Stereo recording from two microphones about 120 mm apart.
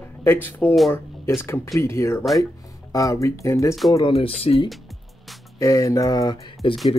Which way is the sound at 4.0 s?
55° left (ahead or behind).